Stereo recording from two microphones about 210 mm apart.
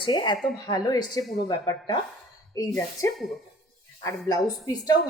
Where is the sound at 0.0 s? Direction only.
20° left (ahead or behind).